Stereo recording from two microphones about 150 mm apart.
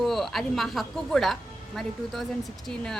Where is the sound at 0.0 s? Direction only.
Centre (ahead or behind).